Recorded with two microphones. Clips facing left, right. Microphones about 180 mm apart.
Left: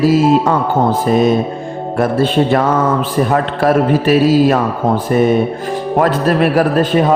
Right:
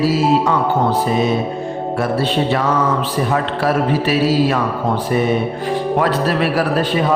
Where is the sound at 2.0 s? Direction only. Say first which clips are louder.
Left 6 dB; 50° left (ahead or behind).